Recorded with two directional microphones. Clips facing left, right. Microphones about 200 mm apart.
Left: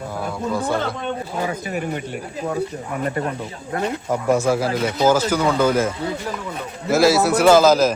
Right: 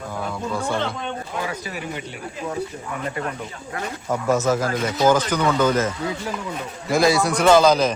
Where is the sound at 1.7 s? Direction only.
50° left (ahead or behind).